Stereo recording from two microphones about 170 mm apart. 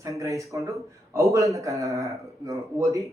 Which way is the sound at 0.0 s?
20° right (ahead or behind).